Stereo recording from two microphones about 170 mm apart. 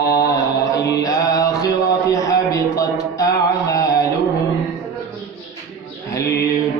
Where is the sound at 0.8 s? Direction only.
20° left (ahead or behind).